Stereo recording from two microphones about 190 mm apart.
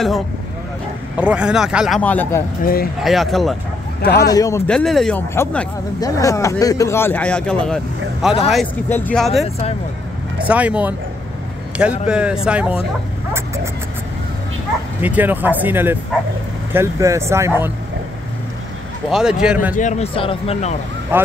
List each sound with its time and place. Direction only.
1.1 s speech: 5° right (ahead or behind)
2.0 s speech: 10° left (ahead or behind)
2.6 s speech: 50° left (ahead or behind)
3.0 s speech: centre (ahead or behind)
4.2 s speech: 20° left (ahead or behind)
4.6 s speech: centre (ahead or behind)
10.5 s speech: 5° right (ahead or behind)
12.1 s speech: 5° right (ahead or behind)
15.0 s speech: 10° right (ahead or behind)
19.0 s speech: 5° right (ahead or behind)
19.7 s speech: 40° left (ahead or behind)
21.1 s speech: 10° right (ahead or behind)